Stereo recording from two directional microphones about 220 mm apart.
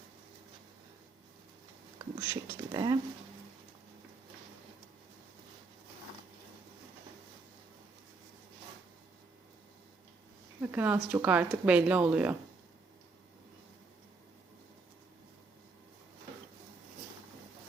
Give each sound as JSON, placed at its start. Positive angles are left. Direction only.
{"t": 2.0, "sound": "speech", "side_deg": -20}
{"t": 10.6, "sound": "speech", "side_deg": -10}